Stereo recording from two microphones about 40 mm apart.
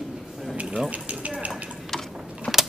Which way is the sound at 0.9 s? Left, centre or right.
Right.